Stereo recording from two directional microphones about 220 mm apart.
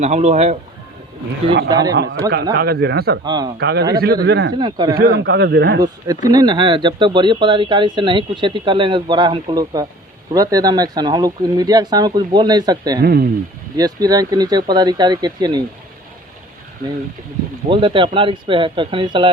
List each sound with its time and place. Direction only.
0.0 s speech: 30° right (ahead or behind)
2.3 s speech: 45° right (ahead or behind)
3.2 s speech: 20° right (ahead or behind)
3.6 s speech: 50° right (ahead or behind)
4.5 s speech: 20° right (ahead or behind)
4.9 s speech: 45° right (ahead or behind)
6.2 s speech: 20° right (ahead or behind)
13.0 s speech: 45° right (ahead or behind)
13.7 s speech: 15° right (ahead or behind)
17.7 s speech: 20° right (ahead or behind)